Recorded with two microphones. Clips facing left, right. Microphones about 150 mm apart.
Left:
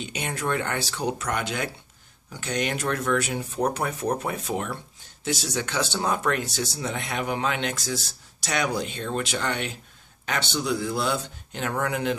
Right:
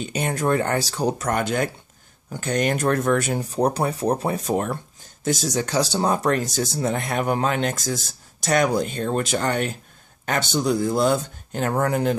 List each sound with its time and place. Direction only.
0.0 s speech: 45° right (ahead or behind)